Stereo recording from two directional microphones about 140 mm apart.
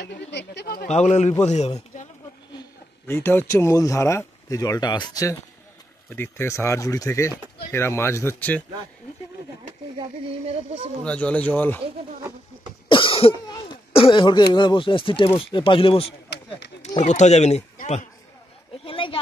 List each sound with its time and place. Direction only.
0.8 s speech: 55° left (ahead or behind)
3.1 s speech: 15° left (ahead or behind)
9.9 s speech: 45° right (ahead or behind)
11.1 s speech: 10° left (ahead or behind)
12.8 s speech: 40° left (ahead or behind)
16.8 s speech: 55° left (ahead or behind)
18.9 s a sound: 40° left (ahead or behind)